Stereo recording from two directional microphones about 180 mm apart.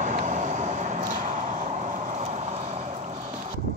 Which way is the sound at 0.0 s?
45° right (ahead or behind).